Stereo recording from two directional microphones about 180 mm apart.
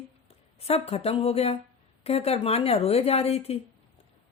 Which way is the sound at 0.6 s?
35° left (ahead or behind).